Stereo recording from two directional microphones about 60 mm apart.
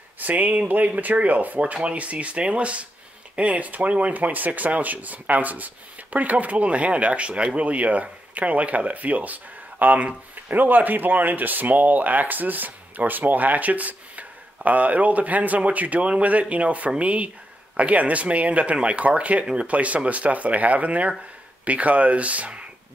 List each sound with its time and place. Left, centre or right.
0.2 s speech: right